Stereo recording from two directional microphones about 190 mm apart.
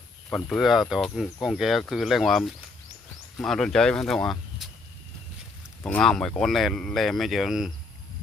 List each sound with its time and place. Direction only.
0.3 s speech: 5° left (ahead or behind)
5.8 s speech: 5° left (ahead or behind)